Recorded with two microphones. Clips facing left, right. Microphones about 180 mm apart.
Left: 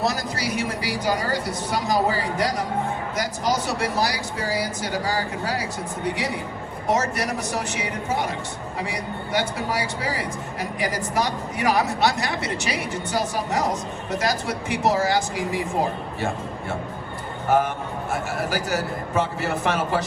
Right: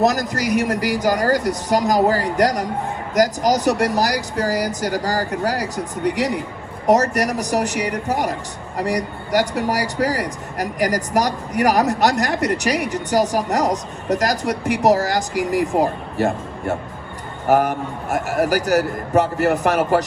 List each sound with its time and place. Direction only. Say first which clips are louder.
0.2 s speech: right 7 dB; 40° right (ahead or behind)